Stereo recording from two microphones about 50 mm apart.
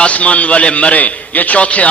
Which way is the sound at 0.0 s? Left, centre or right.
Left.